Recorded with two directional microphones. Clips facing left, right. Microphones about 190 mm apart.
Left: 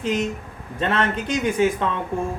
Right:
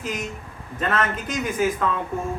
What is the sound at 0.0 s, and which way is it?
Speech, 30° left (ahead or behind).